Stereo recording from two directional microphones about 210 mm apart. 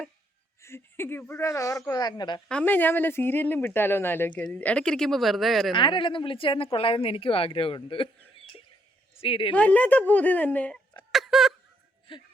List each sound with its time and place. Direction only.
0.6 s speech: 10° left (ahead or behind)
2.5 s speech: 5° left (ahead or behind)
5.7 s a woman's voice: 25° left (ahead or behind)
9.6 s speech: 5° left (ahead or behind)
11.1 s a sound: centre (ahead or behind)
12.1 s speech: 25° left (ahead or behind)